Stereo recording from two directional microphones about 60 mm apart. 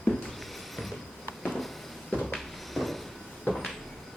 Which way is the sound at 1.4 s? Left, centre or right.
Centre.